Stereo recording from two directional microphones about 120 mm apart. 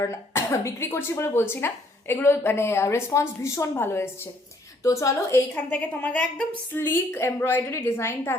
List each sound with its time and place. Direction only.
0.0 s speech: 25° left (ahead or behind)